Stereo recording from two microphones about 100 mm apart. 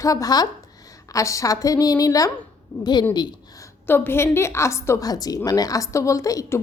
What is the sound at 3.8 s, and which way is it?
A woman's voice, 20° left (ahead or behind).